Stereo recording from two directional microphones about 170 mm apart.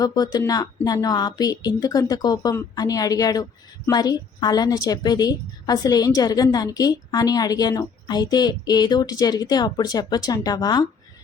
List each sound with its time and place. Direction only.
0.0 s a woman's voice: 20° left (ahead or behind)